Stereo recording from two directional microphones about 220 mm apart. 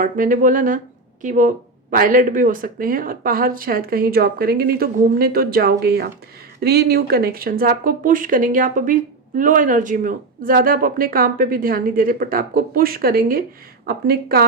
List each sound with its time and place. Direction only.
0.0 s a woman's voice: 35° right (ahead or behind)